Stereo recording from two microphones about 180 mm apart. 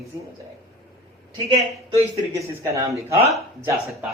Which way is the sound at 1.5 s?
35° right (ahead or behind).